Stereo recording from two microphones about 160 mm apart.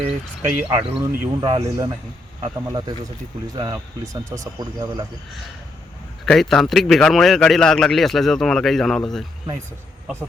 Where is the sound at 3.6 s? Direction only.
25° right (ahead or behind).